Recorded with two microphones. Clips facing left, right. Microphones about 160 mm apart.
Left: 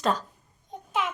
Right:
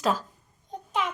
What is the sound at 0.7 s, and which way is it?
Babbling, centre (ahead or behind).